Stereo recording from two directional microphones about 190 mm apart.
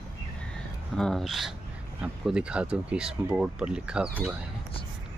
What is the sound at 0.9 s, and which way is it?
Speech, centre (ahead or behind).